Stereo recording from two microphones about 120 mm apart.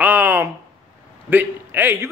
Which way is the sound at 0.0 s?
15° right (ahead or behind).